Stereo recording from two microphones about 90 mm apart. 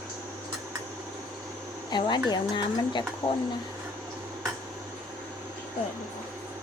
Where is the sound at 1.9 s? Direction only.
55° left (ahead or behind).